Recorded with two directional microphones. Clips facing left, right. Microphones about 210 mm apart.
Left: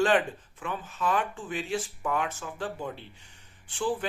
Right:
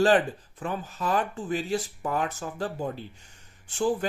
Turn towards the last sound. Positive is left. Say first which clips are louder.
# right 4 dB
turn(degrees=-40)  # may be behind; listen again after turning